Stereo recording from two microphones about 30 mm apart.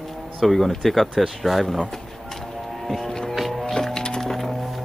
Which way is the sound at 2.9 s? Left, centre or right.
Centre.